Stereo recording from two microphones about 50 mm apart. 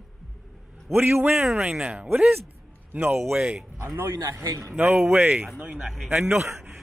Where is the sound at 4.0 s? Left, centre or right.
Right.